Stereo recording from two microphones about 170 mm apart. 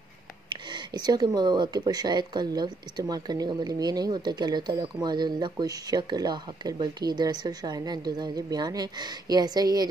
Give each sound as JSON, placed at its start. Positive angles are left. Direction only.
{"t": 0.5, "sound": "speech", "side_deg": -25}